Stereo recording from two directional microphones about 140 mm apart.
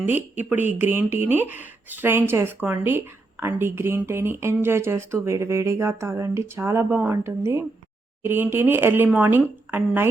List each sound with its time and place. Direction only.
0.0 s speech: 15° right (ahead or behind)